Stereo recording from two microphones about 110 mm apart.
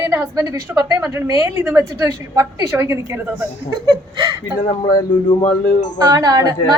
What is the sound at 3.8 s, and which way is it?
Speech, 40° right (ahead or behind).